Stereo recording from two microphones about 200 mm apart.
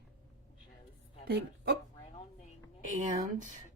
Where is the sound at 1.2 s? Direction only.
55° right (ahead or behind).